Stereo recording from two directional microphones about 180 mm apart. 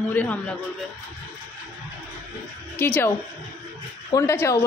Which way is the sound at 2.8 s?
10° left (ahead or behind).